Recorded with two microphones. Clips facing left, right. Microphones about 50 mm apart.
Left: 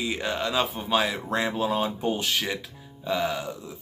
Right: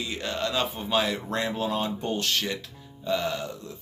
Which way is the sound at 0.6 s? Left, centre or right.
Centre.